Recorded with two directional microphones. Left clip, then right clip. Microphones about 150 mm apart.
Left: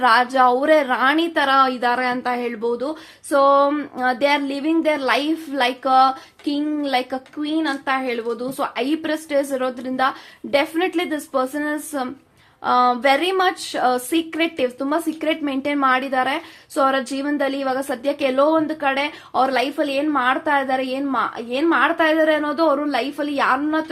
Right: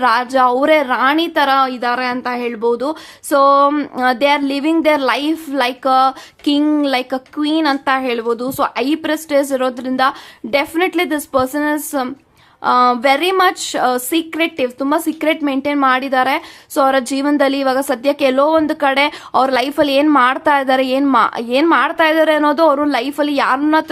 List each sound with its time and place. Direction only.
0.0 s a woman's voice: 25° right (ahead or behind)
6.4 s speech: 45° right (ahead or behind)